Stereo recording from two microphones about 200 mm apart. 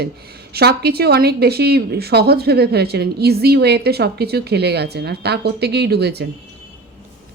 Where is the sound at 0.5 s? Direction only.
50° right (ahead or behind).